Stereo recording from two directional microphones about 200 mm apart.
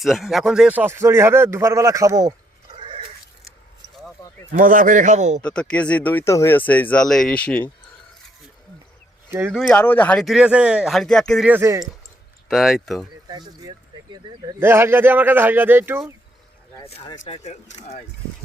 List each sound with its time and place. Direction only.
0.0 s speech: centre (ahead or behind); by 2.3 s 15° right (ahead or behind)
2.7 s cat: 25° right (ahead or behind)
4.5 s a man's voice: 40° right (ahead or behind)
5.4 s speech: 5° left (ahead or behind)
9.3 s speech: 10° right (ahead or behind)
9.6 s speech: 5° left (ahead or behind); by 11.9 s 15° right (ahead or behind)
12.5 s speech: centre (ahead or behind)
13.2 s speech: 20° right (ahead or behind)
17.2 s speech: 30° left (ahead or behind)